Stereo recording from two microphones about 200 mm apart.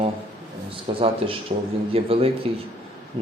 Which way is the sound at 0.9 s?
25° right (ahead or behind).